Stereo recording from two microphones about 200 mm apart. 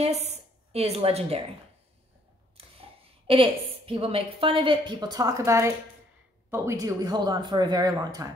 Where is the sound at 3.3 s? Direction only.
25° right (ahead or behind).